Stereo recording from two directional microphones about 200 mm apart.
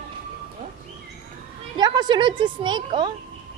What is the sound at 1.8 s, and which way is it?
A woman's voice, 20° right (ahead or behind).